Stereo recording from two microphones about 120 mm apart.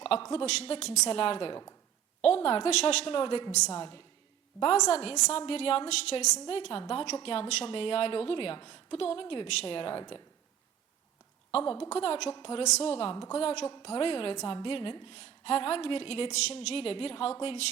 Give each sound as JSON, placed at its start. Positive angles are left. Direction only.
{"t": 0.0, "sound": "speech", "side_deg": 50}
{"t": 0.4, "sound": "a woman's voice", "side_deg": 60}
{"t": 4.6, "sound": "a woman's voice", "side_deg": 55}
{"t": 11.5, "sound": "a woman's voice", "side_deg": 45}